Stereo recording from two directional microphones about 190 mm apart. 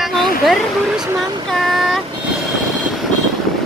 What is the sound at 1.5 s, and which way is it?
Speech, centre (ahead or behind).